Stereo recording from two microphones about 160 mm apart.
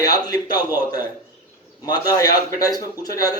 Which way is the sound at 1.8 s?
25° left (ahead or behind).